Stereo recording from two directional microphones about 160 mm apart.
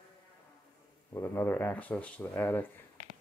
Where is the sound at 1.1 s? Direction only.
15° left (ahead or behind).